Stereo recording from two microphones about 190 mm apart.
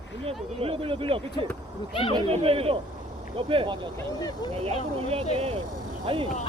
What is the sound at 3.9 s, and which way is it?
Speech, 20° left (ahead or behind).